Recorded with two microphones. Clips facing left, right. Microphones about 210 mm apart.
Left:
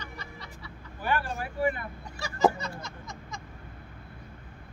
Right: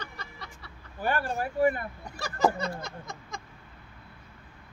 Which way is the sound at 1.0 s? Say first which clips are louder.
Right 2 dB; 45° right (ahead or behind).